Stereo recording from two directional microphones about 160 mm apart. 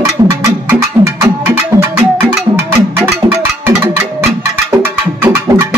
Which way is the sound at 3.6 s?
15° right (ahead or behind).